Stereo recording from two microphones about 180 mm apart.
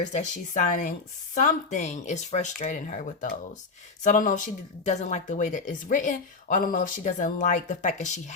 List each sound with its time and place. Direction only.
0.0 s speech: 40° left (ahead or behind)